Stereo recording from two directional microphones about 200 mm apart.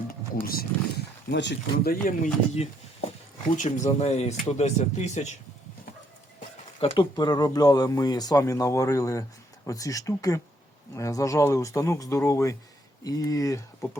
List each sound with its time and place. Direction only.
0.4 s speech: 50° left (ahead or behind)
6.7 s speech: 25° left (ahead or behind)